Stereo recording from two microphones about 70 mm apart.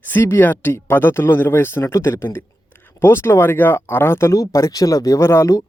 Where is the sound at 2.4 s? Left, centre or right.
Left.